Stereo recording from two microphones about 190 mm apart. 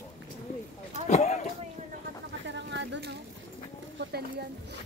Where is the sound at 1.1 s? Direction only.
35° left (ahead or behind).